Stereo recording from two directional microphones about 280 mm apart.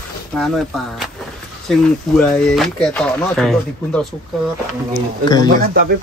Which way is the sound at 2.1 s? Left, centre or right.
Centre.